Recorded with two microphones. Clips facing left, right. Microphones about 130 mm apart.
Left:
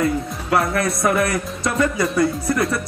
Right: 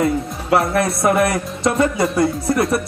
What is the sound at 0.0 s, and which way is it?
Speech, 25° right (ahead or behind).